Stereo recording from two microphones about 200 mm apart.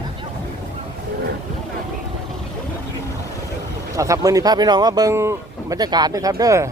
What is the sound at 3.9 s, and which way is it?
Speech, 15° right (ahead or behind).